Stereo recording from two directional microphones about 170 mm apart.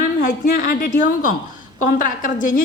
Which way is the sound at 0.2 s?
50° left (ahead or behind).